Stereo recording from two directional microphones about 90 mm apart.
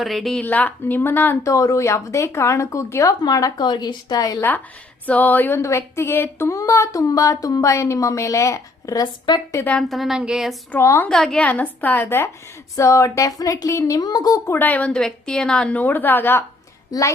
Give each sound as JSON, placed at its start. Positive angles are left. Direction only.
{"t": 0.0, "sound": "a woman's voice", "side_deg": 0}
{"t": 0.4, "sound": "speech", "side_deg": 20}
{"t": 1.5, "sound": "speech", "side_deg": 40}
{"t": 4.4, "sound": "speech", "side_deg": 20}
{"t": 6.5, "sound": "speech", "side_deg": 35}
{"t": 9.3, "sound": "speech", "side_deg": 55}
{"t": 9.9, "sound": "a woman's voice", "side_deg": -5}
{"t": 11.1, "sound": "a woman's voice", "side_deg": 5}
{"t": 11.4, "sound": "speech", "side_deg": 15}
{"t": 14.0, "sound": "a woman's voice", "side_deg": 45}
{"t": 14.4, "sound": "a woman's voice", "side_deg": 25}